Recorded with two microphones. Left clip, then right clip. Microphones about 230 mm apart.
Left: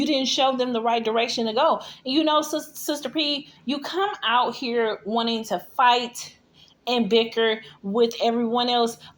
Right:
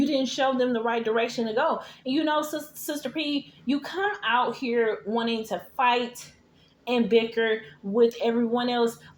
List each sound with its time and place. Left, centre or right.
0.0 s speech: left